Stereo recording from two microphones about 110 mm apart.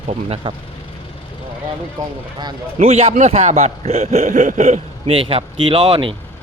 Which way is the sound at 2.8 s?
65° right (ahead or behind).